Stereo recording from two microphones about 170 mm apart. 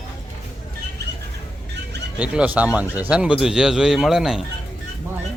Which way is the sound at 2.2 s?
10° right (ahead or behind).